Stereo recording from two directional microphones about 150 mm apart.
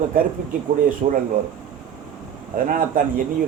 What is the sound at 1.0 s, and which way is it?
Speech, 50° right (ahead or behind).